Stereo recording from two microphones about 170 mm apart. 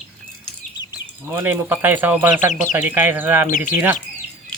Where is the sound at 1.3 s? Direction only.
15° right (ahead or behind).